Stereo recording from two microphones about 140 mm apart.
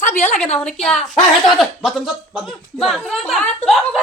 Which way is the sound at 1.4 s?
Centre (ahead or behind).